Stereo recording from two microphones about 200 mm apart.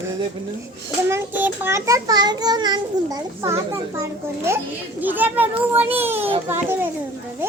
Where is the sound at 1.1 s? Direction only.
10° right (ahead or behind).